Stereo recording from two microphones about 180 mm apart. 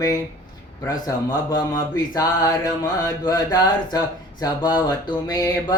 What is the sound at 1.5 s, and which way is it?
Mantra, 20° left (ahead or behind).